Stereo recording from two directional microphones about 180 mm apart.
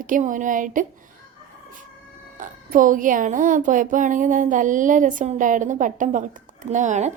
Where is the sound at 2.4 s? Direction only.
45° right (ahead or behind).